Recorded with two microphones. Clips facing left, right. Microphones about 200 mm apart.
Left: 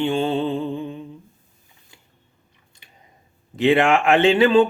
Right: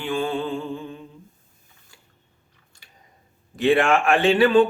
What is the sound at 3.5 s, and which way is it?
Speech, 20° left (ahead or behind).